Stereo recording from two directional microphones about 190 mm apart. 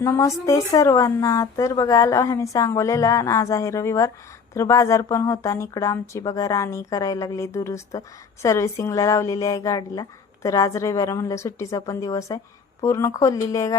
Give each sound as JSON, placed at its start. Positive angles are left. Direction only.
{"t": 0.0, "sound": "a woman's voice", "side_deg": 15}